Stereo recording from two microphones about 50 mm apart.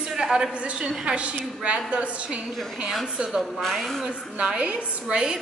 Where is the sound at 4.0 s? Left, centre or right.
Centre.